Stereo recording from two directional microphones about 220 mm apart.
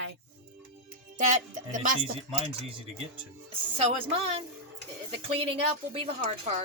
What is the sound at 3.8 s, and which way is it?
Speech, 25° right (ahead or behind).